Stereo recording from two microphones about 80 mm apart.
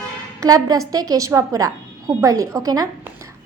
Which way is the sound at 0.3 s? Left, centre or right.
Right.